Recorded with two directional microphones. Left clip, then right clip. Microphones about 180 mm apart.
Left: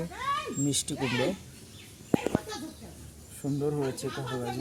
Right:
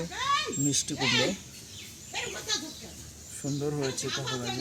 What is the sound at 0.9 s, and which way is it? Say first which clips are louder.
Speech: right 5 dB; 50° left (ahead or behind).